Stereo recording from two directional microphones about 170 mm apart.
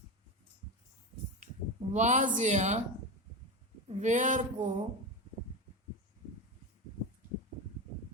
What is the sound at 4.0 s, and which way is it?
Speech, 45° right (ahead or behind).